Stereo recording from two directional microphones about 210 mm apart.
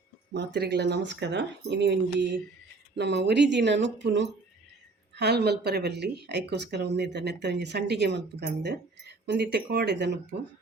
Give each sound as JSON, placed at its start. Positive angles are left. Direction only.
{"t": 0.3, "sound": "speech", "side_deg": -55}